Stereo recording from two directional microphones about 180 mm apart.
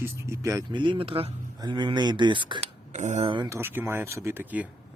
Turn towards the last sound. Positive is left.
turn(degrees=-10)  # may be behind; listen again after turning